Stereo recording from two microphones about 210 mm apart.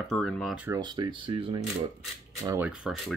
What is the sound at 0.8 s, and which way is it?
Speech, 20° right (ahead or behind).